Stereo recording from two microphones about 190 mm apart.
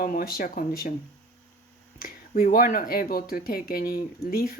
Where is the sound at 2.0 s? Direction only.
50° left (ahead or behind).